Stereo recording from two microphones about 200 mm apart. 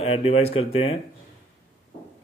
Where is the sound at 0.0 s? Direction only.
30° left (ahead or behind).